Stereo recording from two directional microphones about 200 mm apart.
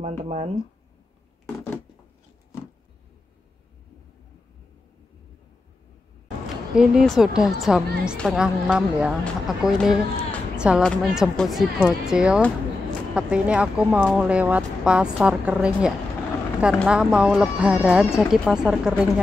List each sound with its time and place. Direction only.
0.0 s speech: 35° right (ahead or behind)
6.7 s a woman's voice: 5° right (ahead or behind)